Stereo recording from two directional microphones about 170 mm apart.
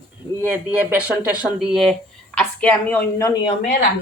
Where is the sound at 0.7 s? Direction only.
10° right (ahead or behind); by 3.4 s 20° left (ahead or behind).